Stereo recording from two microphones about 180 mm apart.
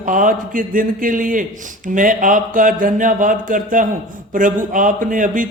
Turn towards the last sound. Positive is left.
turn(degrees=-50)  # may be behind; listen again after turning